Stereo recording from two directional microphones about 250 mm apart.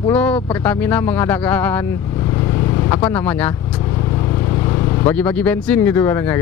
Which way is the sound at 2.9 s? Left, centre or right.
Centre.